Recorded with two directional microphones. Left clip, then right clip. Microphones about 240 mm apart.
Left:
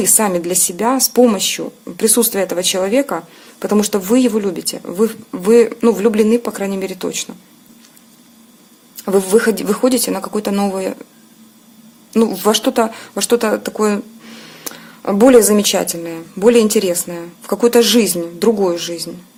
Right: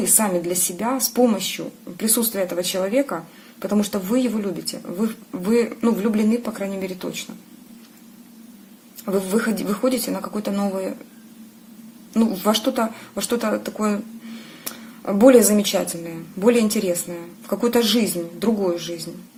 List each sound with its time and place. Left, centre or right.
0.1 s speech: left
9.0 s speech: left
12.1 s speech: left